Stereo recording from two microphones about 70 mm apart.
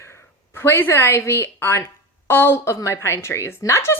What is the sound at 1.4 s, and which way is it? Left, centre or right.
Speech, left.